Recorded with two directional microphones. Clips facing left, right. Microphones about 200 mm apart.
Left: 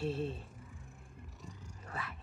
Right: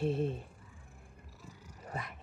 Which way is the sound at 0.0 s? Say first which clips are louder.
Right 4 dB; 20° right (ahead or behind).